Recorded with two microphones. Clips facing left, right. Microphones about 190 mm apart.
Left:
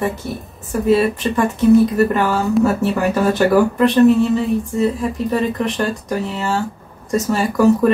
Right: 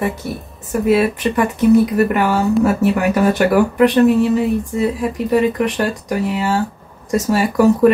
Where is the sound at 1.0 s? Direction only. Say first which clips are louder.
Right 1 dB; 15° right (ahead or behind).